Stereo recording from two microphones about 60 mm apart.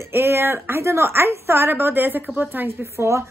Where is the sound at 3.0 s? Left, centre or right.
Right.